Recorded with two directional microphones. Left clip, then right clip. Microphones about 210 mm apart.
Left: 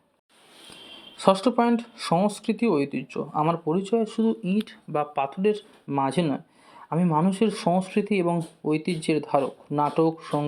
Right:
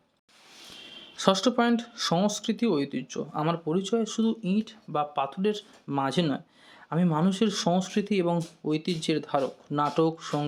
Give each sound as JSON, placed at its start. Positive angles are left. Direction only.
{"t": 1.1, "sound": "speech", "side_deg": -5}
{"t": 4.6, "sound": "speech", "side_deg": 0}